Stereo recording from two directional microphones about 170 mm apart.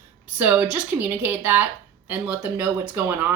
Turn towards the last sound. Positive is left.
turn(degrees=-10)  # may be behind; listen again after turning